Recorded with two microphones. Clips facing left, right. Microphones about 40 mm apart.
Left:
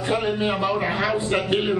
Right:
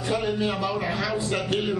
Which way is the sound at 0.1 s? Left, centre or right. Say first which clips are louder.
Left 3 dB; left.